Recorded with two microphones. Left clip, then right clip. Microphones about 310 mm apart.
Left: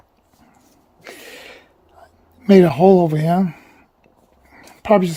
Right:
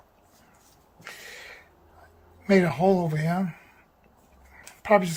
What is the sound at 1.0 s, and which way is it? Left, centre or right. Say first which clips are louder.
Gasp: left 5 dB; left.